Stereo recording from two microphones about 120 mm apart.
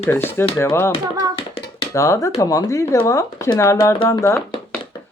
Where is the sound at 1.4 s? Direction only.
50° left (ahead or behind).